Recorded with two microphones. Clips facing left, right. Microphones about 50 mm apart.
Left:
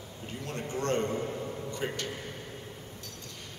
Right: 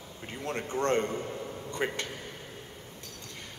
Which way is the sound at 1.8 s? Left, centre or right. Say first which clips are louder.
Right 3 dB; right.